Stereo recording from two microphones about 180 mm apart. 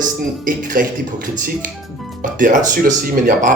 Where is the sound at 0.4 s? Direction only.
50° right (ahead or behind).